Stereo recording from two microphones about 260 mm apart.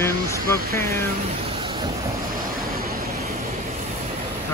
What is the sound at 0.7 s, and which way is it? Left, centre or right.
Speech, centre.